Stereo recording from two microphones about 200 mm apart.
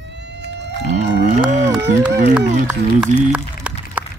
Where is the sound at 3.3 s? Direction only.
5° right (ahead or behind).